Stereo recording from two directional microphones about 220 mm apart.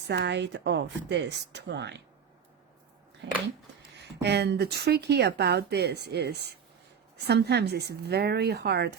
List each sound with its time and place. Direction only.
0.1 s speech: 50° right (ahead or behind)
3.2 s speech: 55° right (ahead or behind)